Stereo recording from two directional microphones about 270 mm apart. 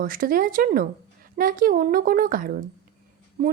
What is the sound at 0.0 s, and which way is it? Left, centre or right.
A woman's voice, right.